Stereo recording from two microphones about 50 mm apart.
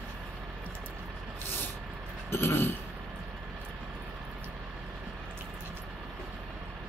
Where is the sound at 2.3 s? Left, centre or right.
Left.